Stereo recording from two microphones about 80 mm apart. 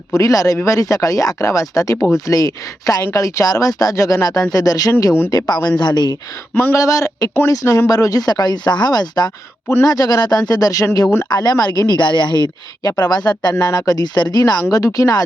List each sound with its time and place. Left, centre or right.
0.1 s speech: left
5.5 s speech: left
6.5 s speech: left
6.7 s speech: left
11.3 s speech: left
12.8 s speech: left
13.6 s speech: left
14.7 s speech: left